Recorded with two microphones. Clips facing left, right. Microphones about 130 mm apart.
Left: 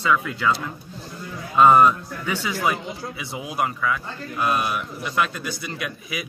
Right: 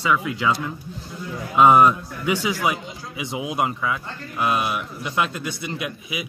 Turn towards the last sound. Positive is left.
turn(degrees=-20)  # may be behind; listen again after turning